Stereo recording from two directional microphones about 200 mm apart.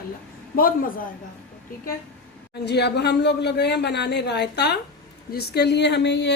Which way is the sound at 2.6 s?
55° left (ahead or behind).